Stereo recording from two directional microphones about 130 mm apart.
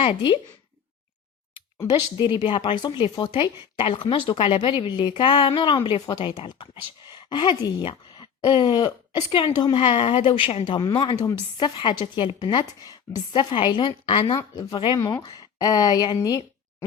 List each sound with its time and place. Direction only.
0.0 s speech: 45° left (ahead or behind)
1.9 s speech: 35° left (ahead or behind)